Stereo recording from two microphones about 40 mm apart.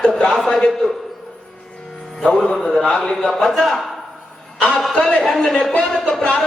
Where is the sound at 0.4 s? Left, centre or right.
Left.